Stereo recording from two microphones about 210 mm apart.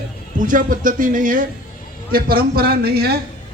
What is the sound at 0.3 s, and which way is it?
A man's voice, 40° right (ahead or behind).